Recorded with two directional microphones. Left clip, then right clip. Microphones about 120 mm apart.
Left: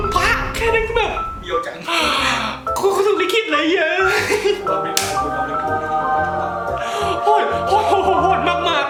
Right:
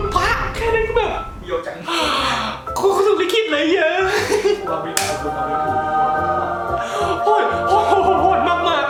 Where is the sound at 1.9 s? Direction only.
Centre (ahead or behind).